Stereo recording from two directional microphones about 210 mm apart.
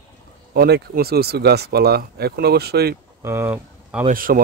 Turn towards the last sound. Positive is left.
turn(degrees=-40)  # may be behind; listen again after turning